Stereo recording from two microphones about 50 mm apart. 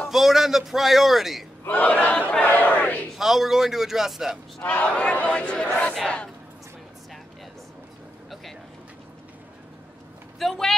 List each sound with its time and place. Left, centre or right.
0.1 s a man's voice: centre
1.7 s battle cry: left
3.2 s a man's voice: centre
4.6 s speech: left
10.4 s a man's voice: centre